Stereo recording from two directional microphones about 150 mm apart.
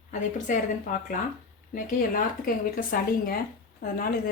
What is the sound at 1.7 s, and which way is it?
Speech, 60° left (ahead or behind).